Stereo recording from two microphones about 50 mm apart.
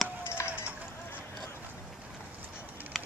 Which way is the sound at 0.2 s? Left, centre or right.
Left.